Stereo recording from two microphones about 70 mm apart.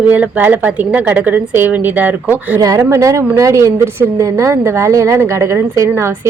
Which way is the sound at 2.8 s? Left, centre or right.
Right.